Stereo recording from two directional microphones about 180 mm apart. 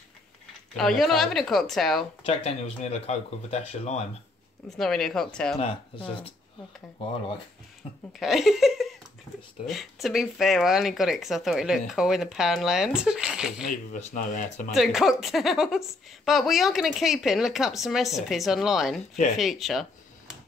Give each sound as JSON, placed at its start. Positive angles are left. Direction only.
{"t": 0.7, "sound": "speech", "side_deg": 0}
{"t": 2.2, "sound": "speech", "side_deg": 35}
{"t": 4.6, "sound": "speech", "side_deg": 0}
{"t": 5.6, "sound": "speech", "side_deg": 30}
{"t": 8.2, "sound": "speech", "side_deg": 0}
{"t": 13.7, "sound": "speech", "side_deg": 45}
{"t": 14.7, "sound": "speech", "side_deg": 0}